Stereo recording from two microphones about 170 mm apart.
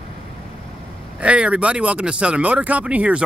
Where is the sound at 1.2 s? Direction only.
5° right (ahead or behind).